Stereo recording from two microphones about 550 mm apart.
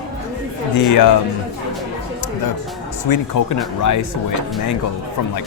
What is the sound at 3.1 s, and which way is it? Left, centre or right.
Speech, left.